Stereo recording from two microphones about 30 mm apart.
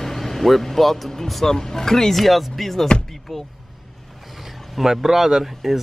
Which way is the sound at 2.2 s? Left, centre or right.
Centre.